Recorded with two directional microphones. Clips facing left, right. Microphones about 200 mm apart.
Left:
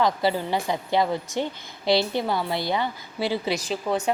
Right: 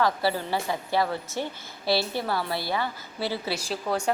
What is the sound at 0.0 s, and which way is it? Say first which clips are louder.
A woman's voice: left 2 dB; 15° left (ahead or behind).